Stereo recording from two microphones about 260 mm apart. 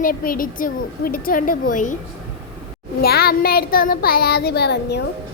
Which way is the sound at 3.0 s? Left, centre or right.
Left.